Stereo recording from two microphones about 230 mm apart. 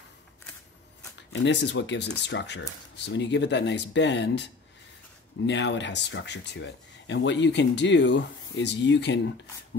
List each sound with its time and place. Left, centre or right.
1.3 s speech: left
5.5 s speech: left